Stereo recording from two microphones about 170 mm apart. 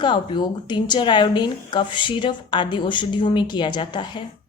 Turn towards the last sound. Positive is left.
turn(degrees=25)  # may be behind; listen again after turning